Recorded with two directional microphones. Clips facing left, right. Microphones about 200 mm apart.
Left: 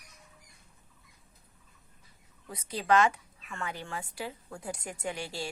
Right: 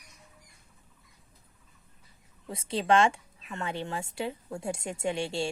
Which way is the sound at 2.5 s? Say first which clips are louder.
Right 2 dB; 25° right (ahead or behind).